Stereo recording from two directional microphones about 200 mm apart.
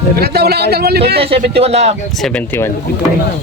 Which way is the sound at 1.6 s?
30° right (ahead or behind).